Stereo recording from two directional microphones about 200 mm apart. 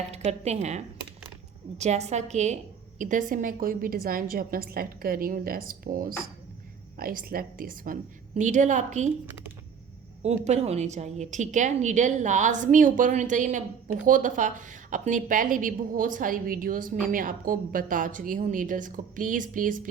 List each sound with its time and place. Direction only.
0.1 s a woman's voice: 35° right (ahead or behind)
1.8 s a woman's voice: 35° right (ahead or behind)
10.2 s a woman's voice: 35° right (ahead or behind)